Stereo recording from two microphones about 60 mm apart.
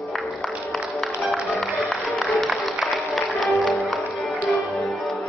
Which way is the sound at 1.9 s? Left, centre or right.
Centre.